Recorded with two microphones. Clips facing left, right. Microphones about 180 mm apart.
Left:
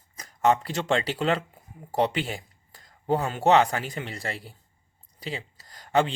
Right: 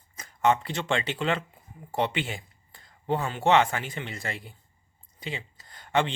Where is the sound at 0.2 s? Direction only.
40° left (ahead or behind).